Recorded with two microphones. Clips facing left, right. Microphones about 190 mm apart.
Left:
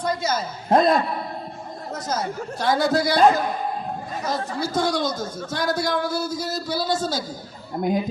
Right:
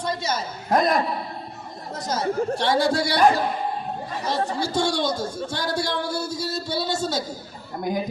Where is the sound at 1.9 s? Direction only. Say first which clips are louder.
Right 3 dB; 30° right (ahead or behind).